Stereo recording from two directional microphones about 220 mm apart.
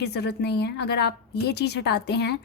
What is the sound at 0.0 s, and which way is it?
A woman's voice, 50° left (ahead or behind).